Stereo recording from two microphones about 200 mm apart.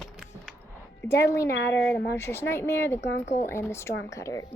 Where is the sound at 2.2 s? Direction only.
15° left (ahead or behind).